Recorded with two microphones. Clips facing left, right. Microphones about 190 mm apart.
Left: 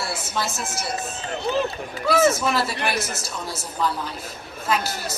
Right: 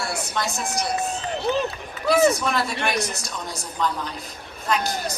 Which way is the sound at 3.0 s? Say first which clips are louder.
Right 1 dB; 15° right (ahead or behind).